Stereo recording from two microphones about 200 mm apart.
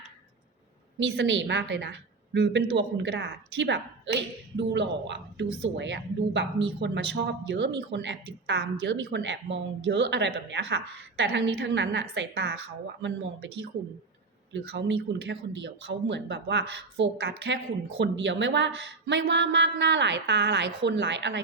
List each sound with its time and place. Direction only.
0.9 s a woman's voice: 65° right (ahead or behind)
14.5 s a woman's voice: 65° right (ahead or behind)